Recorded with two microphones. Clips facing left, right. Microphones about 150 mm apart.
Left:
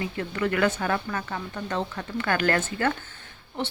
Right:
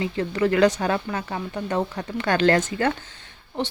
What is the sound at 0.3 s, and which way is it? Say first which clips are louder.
Speech: right 5 dB; 30° right (ahead or behind).